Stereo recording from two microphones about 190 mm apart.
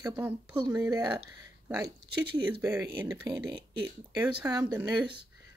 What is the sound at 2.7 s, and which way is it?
Speech, 10° right (ahead or behind).